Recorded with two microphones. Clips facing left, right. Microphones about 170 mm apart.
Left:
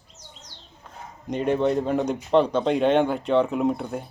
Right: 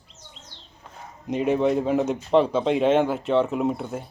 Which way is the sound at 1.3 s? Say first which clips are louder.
Right 1 dB; 5° right (ahead or behind).